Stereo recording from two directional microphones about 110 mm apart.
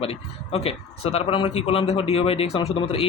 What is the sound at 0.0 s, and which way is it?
Speech, 60° left (ahead or behind).